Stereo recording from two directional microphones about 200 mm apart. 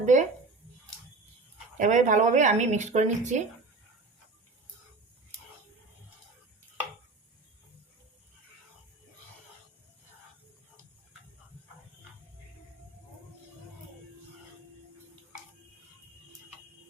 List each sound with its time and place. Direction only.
0.0 s speech: 40° right (ahead or behind)
1.8 s a woman's voice: 40° right (ahead or behind)